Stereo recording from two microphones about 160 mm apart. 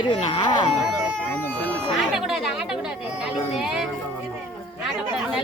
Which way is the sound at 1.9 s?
5° right (ahead or behind).